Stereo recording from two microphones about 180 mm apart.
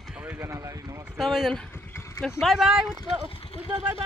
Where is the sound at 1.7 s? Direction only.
15° left (ahead or behind).